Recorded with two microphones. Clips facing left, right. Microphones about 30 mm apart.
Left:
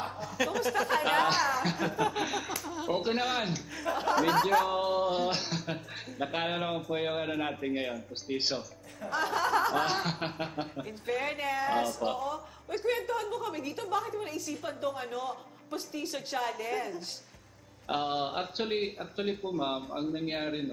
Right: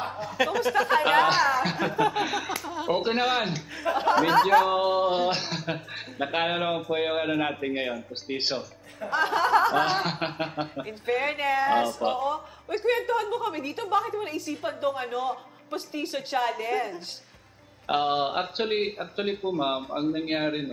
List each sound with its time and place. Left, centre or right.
0.0 s speech: right
1.2 s a sound: centre
2.5 s chuckle: right
3.2 s speech: centre
5.6 s a sound: right
6.9 s speech: right